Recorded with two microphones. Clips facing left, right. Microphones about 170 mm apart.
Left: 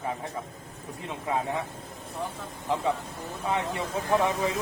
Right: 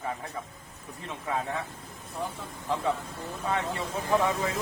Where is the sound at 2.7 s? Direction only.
20° left (ahead or behind).